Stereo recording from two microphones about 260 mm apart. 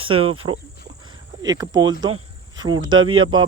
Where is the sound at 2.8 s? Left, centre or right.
Right.